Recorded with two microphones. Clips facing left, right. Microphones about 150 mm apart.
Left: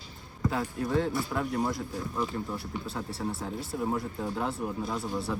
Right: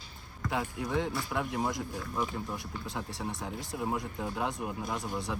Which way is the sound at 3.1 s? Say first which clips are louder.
Left 3 dB; 20° right (ahead or behind).